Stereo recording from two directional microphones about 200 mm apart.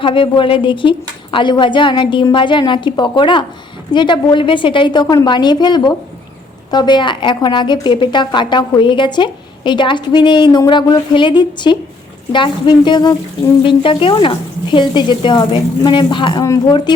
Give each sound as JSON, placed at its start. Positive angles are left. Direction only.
{"t": 0.0, "sound": "a woman's voice", "side_deg": 25}